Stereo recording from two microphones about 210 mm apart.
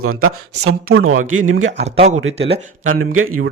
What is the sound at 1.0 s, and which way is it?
Speech, 75° right (ahead or behind).